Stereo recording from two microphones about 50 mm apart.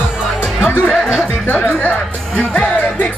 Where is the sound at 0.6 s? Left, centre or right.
Left.